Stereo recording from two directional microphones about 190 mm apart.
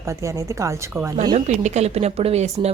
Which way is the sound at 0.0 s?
15° right (ahead or behind).